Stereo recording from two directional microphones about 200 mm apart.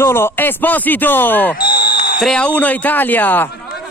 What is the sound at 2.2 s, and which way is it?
Speech, 5° left (ahead or behind).